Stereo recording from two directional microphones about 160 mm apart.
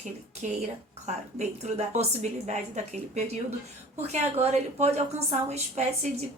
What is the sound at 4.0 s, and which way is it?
A woman's voice, 40° right (ahead or behind).